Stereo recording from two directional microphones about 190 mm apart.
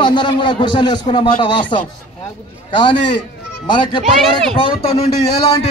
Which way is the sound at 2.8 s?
25° left (ahead or behind).